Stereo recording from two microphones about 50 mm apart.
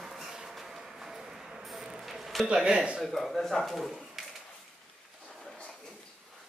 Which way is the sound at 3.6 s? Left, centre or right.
Centre.